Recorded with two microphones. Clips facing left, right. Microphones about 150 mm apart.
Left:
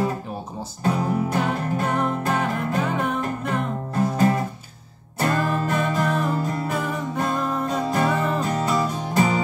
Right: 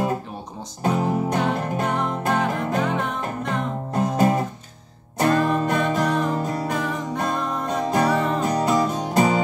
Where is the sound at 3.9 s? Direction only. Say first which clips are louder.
Right 1 dB; 20° right (ahead or behind).